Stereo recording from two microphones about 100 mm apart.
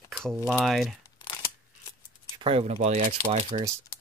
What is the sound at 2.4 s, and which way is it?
Speech, 70° right (ahead or behind).